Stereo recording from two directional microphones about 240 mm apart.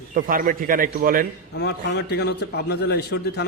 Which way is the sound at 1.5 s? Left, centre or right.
Left.